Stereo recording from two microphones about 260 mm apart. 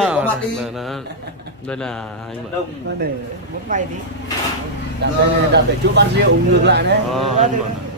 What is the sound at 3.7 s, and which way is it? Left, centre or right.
Speech, right.